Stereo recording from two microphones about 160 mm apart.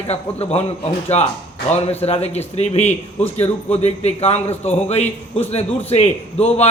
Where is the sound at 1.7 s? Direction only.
40° left (ahead or behind).